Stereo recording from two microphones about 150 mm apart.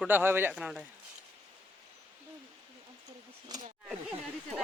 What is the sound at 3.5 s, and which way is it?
Speech, 25° right (ahead or behind).